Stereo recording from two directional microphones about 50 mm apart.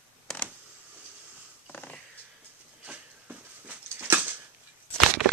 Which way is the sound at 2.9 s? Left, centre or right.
Right.